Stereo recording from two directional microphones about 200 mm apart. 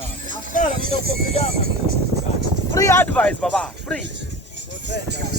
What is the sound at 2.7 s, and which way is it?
Speech, 15° left (ahead or behind).